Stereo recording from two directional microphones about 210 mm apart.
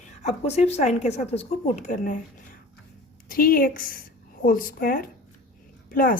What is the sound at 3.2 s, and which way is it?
A woman's voice, 45° left (ahead or behind).